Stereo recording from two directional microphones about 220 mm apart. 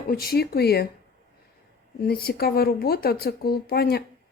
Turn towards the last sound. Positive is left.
turn(degrees=45)  # may be behind; listen again after turning